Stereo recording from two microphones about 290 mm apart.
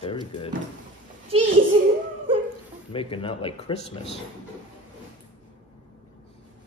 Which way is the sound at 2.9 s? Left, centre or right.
Centre.